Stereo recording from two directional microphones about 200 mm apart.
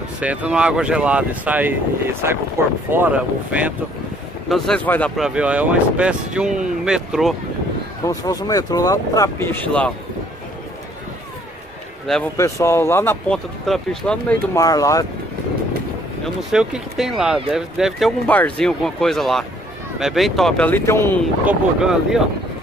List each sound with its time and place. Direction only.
0.2 s speech: 5° right (ahead or behind)
2.9 s speech: 10° right (ahead or behind)
4.5 s speech: 5° left (ahead or behind)
8.0 s speech: 15° left (ahead or behind)
12.1 s speech: 10° left (ahead or behind)
13.7 s speech: centre (ahead or behind)
14.5 s speech: 15° left (ahead or behind)
16.5 s speech: 5° right (ahead or behind); by 21.2 s 15° left (ahead or behind)
21.5 s speech: 5° right (ahead or behind)